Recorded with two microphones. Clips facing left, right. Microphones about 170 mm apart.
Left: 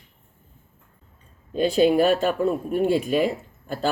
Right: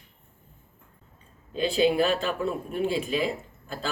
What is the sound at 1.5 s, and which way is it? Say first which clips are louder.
Speech: left 5 dB; 45° left (ahead or behind).